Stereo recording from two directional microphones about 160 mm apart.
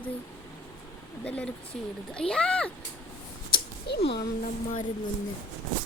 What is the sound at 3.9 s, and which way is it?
Speech, 90° left.